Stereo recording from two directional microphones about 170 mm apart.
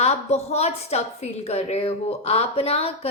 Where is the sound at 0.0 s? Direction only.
40° left (ahead or behind).